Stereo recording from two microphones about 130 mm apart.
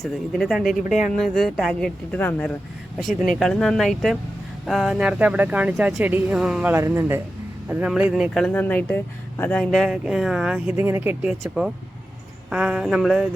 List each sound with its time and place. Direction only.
0.0 s speech: 5° left (ahead or behind)
2.1 s speech: 15° left (ahead or behind)
3.3 s speech: centre (ahead or behind)
6.7 s speech: 20° right (ahead or behind)
8.3 s speech: 5° left (ahead or behind)